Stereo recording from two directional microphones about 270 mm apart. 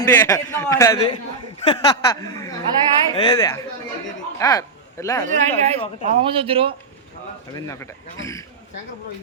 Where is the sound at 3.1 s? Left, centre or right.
Centre.